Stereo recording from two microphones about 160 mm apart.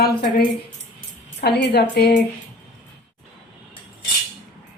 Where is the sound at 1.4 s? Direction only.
90° left.